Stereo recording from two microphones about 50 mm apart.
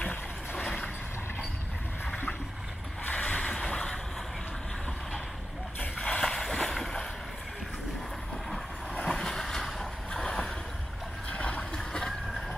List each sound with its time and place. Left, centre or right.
3.1 s a sound: left
5.9 s a sound: centre
6.3 s boat: centre
9.1 s vehicle: centre
11.2 s boat: left
11.7 s vehicle: centre